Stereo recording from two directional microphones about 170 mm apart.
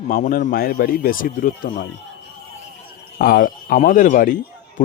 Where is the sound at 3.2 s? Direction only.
55° left (ahead or behind).